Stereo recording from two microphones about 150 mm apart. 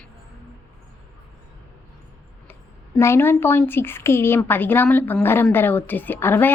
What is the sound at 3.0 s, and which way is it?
A woman's voice, 15° left (ahead or behind).